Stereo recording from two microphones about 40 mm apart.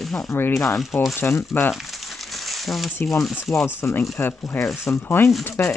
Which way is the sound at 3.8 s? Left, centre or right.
Left.